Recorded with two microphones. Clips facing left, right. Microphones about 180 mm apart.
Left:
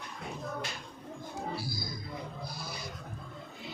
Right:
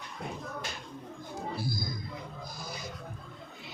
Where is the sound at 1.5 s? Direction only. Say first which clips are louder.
Right 3 dB; 50° right (ahead or behind).